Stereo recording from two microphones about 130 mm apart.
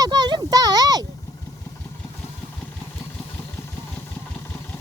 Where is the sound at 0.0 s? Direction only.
30° right (ahead or behind).